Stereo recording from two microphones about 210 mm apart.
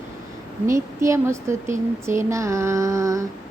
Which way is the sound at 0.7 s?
15° right (ahead or behind).